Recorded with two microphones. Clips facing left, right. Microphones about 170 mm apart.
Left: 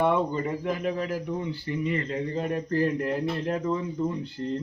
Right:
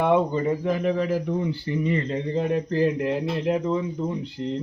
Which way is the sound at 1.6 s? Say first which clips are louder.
Right 4 dB; 30° right (ahead or behind).